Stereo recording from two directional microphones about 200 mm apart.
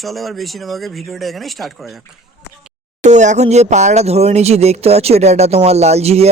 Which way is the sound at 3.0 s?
35° right (ahead or behind).